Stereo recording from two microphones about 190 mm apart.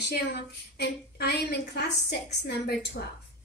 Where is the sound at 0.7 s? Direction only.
60° left (ahead or behind).